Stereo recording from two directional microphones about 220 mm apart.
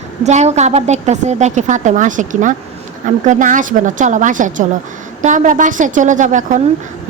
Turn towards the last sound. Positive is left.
turn(degrees=-35)  # may be behind; listen again after turning